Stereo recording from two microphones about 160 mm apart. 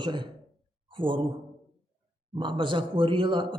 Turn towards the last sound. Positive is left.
turn(degrees=-30)  # may be behind; listen again after turning